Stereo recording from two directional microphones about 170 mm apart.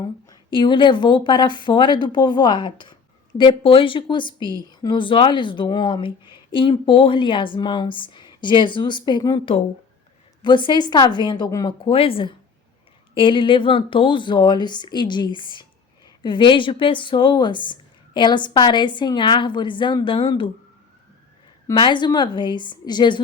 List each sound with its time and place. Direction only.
0.0 s a woman's voice: 25° left (ahead or behind)
4.4 s a woman's voice: 25° right (ahead or behind)
4.7 s a woman's voice: 25° left (ahead or behind)
21.7 s a woman's voice: 25° left (ahead or behind)